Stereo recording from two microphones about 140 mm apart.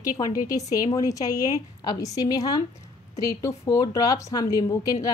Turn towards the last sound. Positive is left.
turn(degrees=25)  # may be behind; listen again after turning